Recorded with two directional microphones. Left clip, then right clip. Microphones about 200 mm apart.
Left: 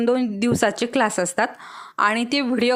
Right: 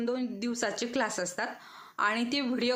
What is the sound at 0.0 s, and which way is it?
A woman's voice, 50° left (ahead or behind).